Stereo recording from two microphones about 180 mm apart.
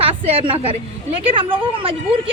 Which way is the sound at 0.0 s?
30° right (ahead or behind).